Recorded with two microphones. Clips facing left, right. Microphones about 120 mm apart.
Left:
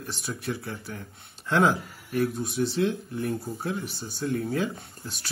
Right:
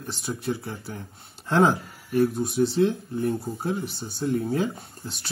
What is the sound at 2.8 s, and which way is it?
Speech, 25° right (ahead or behind).